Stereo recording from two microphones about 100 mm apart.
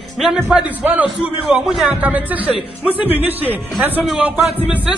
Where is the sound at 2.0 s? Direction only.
15° right (ahead or behind).